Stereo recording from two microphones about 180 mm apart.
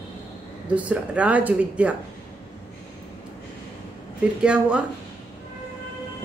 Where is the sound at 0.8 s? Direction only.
5° right (ahead or behind).